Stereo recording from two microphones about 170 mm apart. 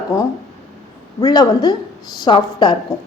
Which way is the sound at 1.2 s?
25° left (ahead or behind).